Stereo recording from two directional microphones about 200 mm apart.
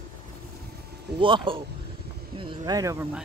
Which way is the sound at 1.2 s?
25° right (ahead or behind).